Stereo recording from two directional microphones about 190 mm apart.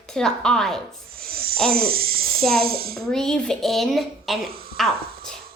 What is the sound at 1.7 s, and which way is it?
Speech, 50° right (ahead or behind).